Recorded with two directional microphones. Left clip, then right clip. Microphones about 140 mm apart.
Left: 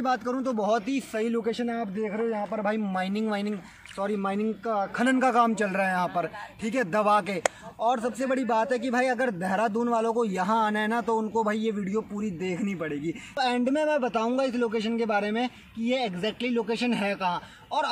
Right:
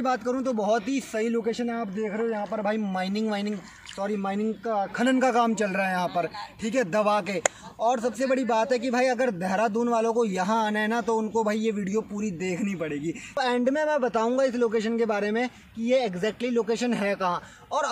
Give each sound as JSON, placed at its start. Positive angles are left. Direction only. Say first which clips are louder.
{"t": 0.0, "sound": "a man's voice", "louder": "right 1 dB", "side_deg": -25}
{"t": 1.3, "sound": "a man's voice", "louder": "right 1 dB", "side_deg": -5}
{"t": 6.7, "sound": "a man's voice", "louder": "even", "side_deg": -5}
{"t": 8.2, "sound": "a man's voice", "louder": "right 2 dB", "side_deg": -20}